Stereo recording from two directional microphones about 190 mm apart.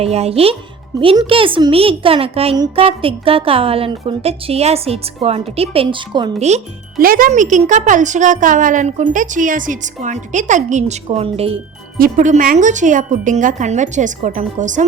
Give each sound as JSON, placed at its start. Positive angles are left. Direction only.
{"t": 0.0, "sound": "a woman's voice", "side_deg": -35}
{"t": 7.0, "sound": "a woman's voice", "side_deg": -50}
{"t": 11.9, "sound": "a woman's voice", "side_deg": -45}